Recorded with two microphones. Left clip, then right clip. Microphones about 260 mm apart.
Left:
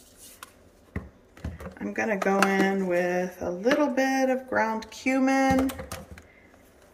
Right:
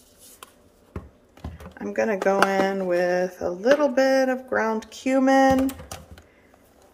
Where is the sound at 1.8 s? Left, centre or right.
Centre.